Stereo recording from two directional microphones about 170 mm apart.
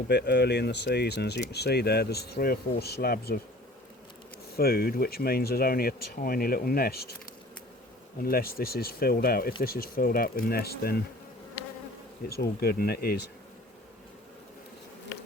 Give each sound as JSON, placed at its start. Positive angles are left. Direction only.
{"t": 0.1, "sound": "speech", "side_deg": 80}
{"t": 4.5, "sound": "speech", "side_deg": 65}
{"t": 8.2, "sound": "speech", "side_deg": 60}
{"t": 12.3, "sound": "speech", "side_deg": 65}